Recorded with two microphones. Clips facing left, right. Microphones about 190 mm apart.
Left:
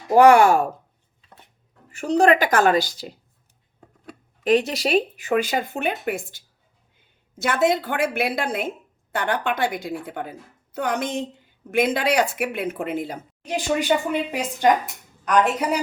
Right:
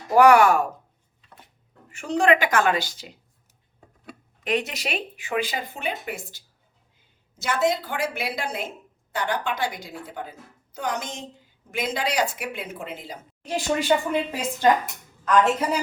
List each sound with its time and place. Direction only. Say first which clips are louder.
0.1 s speech: left 2 dB; 25° left (ahead or behind)
1.9 s a woman's voice: left 3 dB; 40° left (ahead or behind)
4.4 s speech: left 7 dB; 35° left (ahead or behind); by 13.1 s 55° left (ahead or behind)
13.4 s a woman's voice: left 1 dB; 15° left (ahead or behind)